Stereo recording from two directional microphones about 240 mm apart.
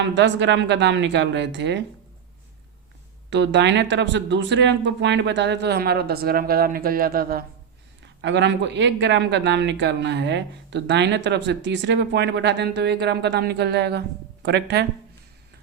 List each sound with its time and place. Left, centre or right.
0.0 s speech: right
3.2 s speech: right